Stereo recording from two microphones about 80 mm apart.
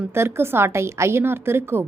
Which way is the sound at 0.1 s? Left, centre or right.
Right.